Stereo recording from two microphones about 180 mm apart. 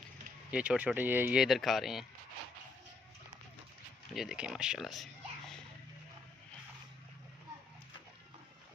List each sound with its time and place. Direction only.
0.5 s speech: 5° right (ahead or behind)
4.1 s speech: centre (ahead or behind)